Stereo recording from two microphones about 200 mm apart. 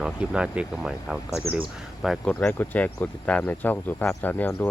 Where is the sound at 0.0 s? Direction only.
5° right (ahead or behind).